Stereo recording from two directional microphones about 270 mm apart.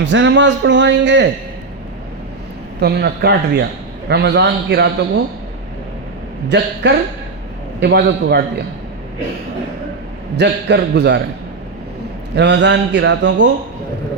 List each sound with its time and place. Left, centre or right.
0.0 s a man's voice: right
2.8 s a man's voice: right
6.8 s a man's voice: right
10.3 s a man's voice: right
12.4 s a man's voice: right